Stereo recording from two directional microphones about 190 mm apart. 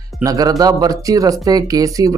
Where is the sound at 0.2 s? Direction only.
20° right (ahead or behind).